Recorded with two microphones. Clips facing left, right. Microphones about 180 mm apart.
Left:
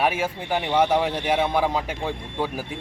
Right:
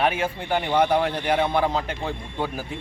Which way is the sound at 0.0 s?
5° left (ahead or behind).